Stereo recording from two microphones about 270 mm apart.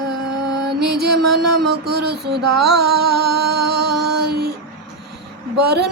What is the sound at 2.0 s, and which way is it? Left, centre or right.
Music, right.